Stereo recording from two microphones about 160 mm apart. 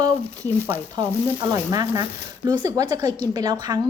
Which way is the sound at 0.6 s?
15° right (ahead or behind).